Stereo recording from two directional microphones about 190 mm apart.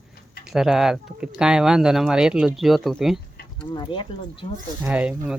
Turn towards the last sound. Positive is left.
turn(degrees=-5)  # may be behind; listen again after turning